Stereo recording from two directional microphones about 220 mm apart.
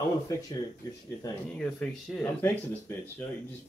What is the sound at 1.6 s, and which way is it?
A man's voice, 5° left (ahead or behind).